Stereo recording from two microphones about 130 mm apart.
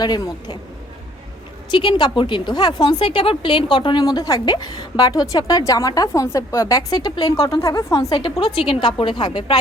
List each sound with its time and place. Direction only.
0.0 s a woman's voice: 30° left (ahead or behind)
1.7 s a woman's voice: 40° left (ahead or behind)